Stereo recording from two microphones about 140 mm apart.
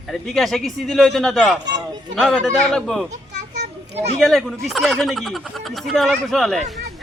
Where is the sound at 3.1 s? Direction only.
60° right (ahead or behind).